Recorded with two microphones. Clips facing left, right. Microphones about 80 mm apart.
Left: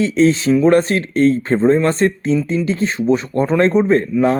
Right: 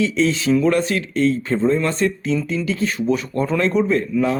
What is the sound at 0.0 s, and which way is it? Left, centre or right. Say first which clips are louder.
Speech: left 5 dB; left.